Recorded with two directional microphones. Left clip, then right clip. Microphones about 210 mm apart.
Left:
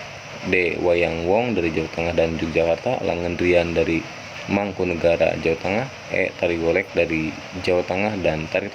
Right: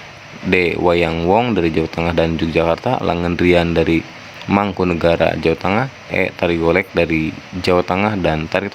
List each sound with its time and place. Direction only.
0.5 s speech: 45° right (ahead or behind)